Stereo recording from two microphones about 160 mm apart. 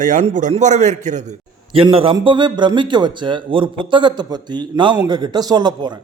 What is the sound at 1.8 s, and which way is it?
A man's voice, 35° right (ahead or behind).